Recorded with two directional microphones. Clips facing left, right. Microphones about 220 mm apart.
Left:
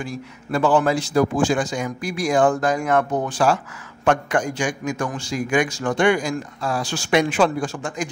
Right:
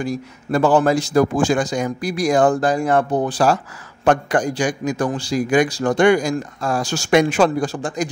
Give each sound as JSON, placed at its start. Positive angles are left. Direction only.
{"t": 0.0, "sound": "a man's voice", "side_deg": -40}